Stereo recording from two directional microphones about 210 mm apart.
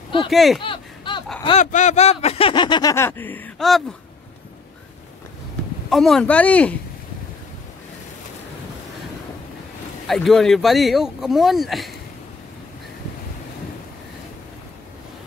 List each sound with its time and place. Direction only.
0.3 s speech: centre (ahead or behind)
0.6 s a sound: 25° left (ahead or behind)
1.4 s speech: 30° left (ahead or behind); by 3.8 s centre (ahead or behind)
5.9 s speech: centre (ahead or behind)
10.0 s speech: centre (ahead or behind)